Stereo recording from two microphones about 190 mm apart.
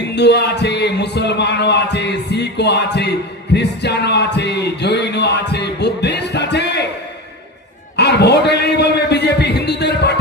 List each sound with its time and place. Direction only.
0.2 s speech: 60° left (ahead or behind)
3.5 s music: 60° left (ahead or behind)
7.9 s a man's voice: 60° left (ahead or behind)